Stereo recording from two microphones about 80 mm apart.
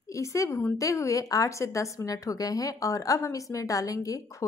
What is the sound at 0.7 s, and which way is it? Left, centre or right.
A woman's voice, left.